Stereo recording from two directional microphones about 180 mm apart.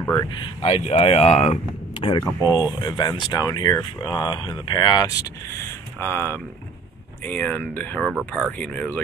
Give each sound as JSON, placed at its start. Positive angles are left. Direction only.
{"t": 0.0, "sound": "speech", "side_deg": 15}
{"t": 0.3, "sound": "speech", "side_deg": 30}
{"t": 2.4, "sound": "speech", "side_deg": -10}
{"t": 2.8, "sound": "speech", "side_deg": 25}
{"t": 5.9, "sound": "speech", "side_deg": 10}